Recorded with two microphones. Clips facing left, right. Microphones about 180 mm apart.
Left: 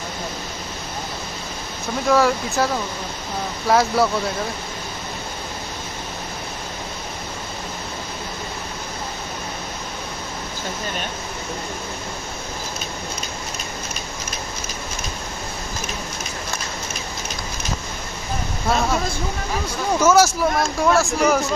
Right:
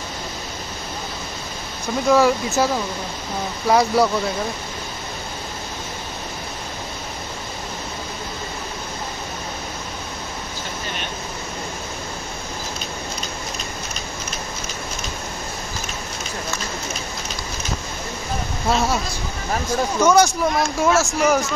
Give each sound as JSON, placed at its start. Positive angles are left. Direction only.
{"t": 2.0, "sound": "speech", "side_deg": 0}
{"t": 3.6, "sound": "speech", "side_deg": 0}
{"t": 20.0, "sound": "speech", "side_deg": 5}